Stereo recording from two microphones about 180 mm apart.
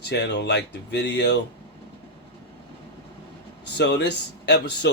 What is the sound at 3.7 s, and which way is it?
Speech, 70° left (ahead or behind).